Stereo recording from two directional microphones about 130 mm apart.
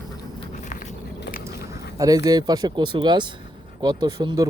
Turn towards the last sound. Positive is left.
turn(degrees=-30)  # may be behind; listen again after turning